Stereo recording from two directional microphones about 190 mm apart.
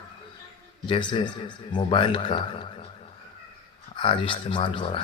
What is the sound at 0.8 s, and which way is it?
A man's voice, 25° left (ahead or behind).